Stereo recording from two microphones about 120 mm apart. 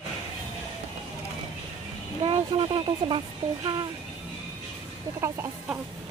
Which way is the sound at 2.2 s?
45° right (ahead or behind).